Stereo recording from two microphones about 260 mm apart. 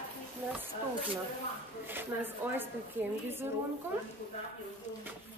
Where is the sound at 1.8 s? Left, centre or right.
Centre.